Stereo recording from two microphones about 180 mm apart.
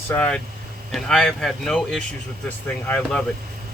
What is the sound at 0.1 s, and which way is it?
Speech, 5° left (ahead or behind).